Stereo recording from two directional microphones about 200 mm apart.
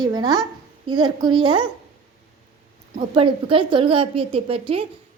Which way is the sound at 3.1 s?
25° right (ahead or behind).